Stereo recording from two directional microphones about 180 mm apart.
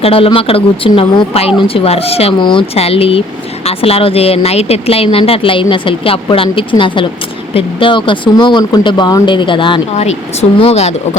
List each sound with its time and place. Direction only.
0.0 s speech: 30° left (ahead or behind)